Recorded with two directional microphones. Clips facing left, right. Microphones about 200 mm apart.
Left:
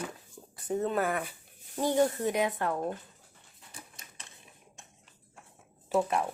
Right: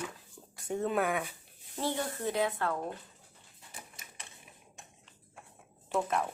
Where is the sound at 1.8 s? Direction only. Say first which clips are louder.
Left 8 dB; 15° left (ahead or behind).